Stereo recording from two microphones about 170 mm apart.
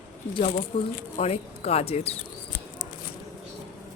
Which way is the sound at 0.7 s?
35° left (ahead or behind).